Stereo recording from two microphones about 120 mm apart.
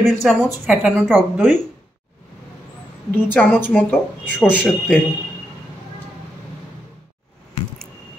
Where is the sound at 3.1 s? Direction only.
15° left (ahead or behind).